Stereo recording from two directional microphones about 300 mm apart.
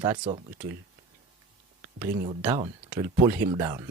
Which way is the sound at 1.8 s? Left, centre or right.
Centre.